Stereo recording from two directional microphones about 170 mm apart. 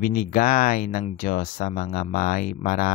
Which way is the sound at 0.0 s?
55° left (ahead or behind).